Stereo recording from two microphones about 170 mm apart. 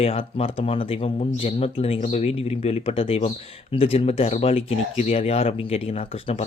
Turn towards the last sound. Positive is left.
turn(degrees=35)  # may be behind; listen again after turning